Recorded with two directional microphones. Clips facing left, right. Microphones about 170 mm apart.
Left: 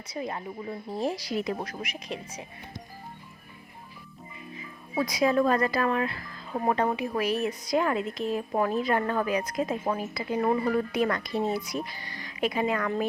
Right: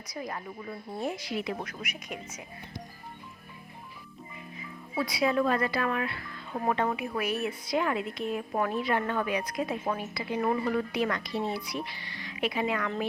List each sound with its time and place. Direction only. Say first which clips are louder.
0.1 s speech: left 4 dB; 25° left (ahead or behind)
4.9 s speech: left 3 dB; 40° left (ahead or behind)
10.9 s speech: left 3 dB; 45° left (ahead or behind)